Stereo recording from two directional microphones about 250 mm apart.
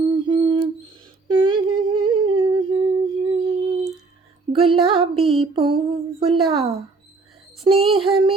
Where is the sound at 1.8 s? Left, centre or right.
Right.